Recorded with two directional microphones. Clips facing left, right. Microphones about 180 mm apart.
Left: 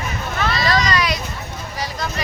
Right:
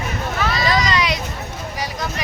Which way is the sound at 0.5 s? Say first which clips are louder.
Even; 20° right (ahead or behind).